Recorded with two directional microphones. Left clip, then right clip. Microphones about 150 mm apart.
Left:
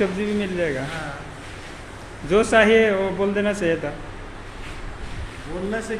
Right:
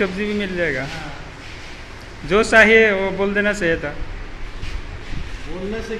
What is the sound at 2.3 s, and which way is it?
A man's voice, centre (ahead or behind).